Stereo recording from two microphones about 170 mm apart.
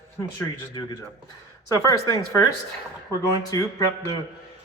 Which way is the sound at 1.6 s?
20° left (ahead or behind).